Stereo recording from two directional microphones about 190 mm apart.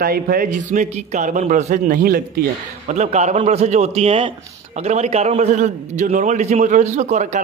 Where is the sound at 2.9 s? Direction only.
35° right (ahead or behind).